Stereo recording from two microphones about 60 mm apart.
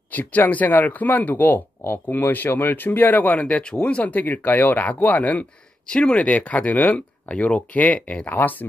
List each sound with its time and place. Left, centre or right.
0.1 s speech: left